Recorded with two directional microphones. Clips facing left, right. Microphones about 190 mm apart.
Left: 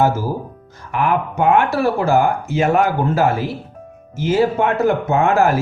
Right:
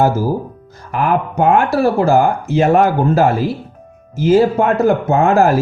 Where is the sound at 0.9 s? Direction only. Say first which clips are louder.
Right 2 dB; 35° right (ahead or behind).